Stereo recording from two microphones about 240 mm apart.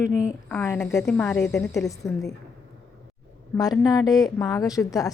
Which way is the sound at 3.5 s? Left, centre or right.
Centre.